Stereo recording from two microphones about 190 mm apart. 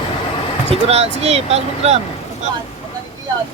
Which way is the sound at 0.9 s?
35° right (ahead or behind).